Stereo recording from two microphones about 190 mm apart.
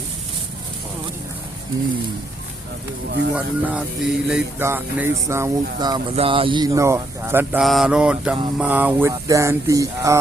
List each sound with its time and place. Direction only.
3.3 s speech: 5° right (ahead or behind)
7.6 s mantra: centre (ahead or behind)
8.5 s speech: 10° right (ahead or behind)